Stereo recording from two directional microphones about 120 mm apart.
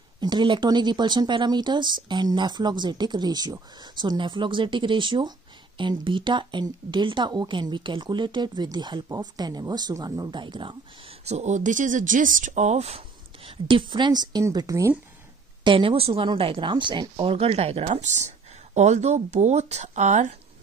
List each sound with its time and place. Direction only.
0.2 s a woman's voice: 40° right (ahead or behind)
11.2 s speech: 70° right (ahead or behind); by 15.0 s 25° right (ahead or behind)
15.6 s a woman's voice: 45° right (ahead or behind); by 20.3 s 85° right